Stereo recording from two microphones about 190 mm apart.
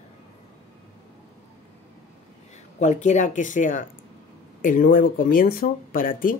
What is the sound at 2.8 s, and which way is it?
Speech, 40° left (ahead or behind).